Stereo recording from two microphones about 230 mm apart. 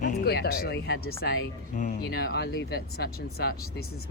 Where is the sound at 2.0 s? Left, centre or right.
Left.